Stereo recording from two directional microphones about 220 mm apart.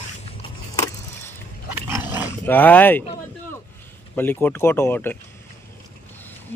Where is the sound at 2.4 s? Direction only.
10° left (ahead or behind).